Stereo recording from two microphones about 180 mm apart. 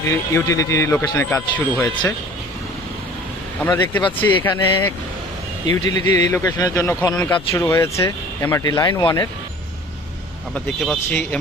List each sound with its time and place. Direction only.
0.1 s speech: 15° left (ahead or behind)
3.6 s a man's voice: 10° left (ahead or behind)
7.1 s speech: 5° left (ahead or behind)
10.5 s speech: 5° left (ahead or behind)